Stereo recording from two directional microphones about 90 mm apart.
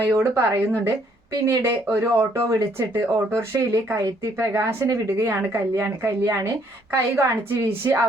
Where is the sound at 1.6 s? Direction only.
30° right (ahead or behind).